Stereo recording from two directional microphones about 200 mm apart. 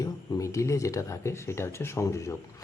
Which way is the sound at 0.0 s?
15° left (ahead or behind).